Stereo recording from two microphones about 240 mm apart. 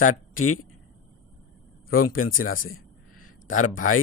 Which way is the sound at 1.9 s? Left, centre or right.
Left.